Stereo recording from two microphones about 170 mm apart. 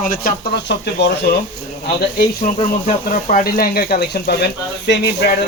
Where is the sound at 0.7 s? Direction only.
80° left.